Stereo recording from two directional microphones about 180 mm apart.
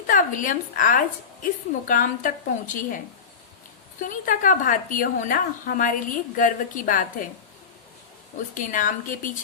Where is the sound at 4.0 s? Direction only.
45° left (ahead or behind).